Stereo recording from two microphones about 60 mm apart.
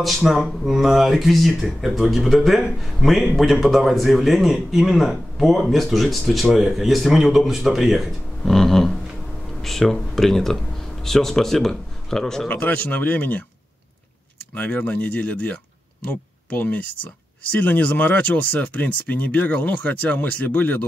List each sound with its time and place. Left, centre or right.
0.2 s a man's voice: centre
12.4 s speech: left
14.5 s speech: left